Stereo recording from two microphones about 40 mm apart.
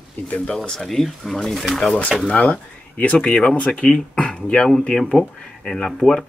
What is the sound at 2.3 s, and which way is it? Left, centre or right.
Speech, left.